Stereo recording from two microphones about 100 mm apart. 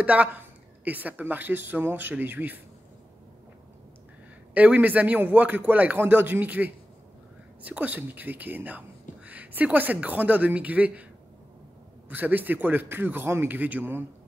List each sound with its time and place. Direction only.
0.0 s speech: 15° right (ahead or behind)
4.6 s speech: 15° right (ahead or behind)
12.1 s a man's voice: 20° right (ahead or behind)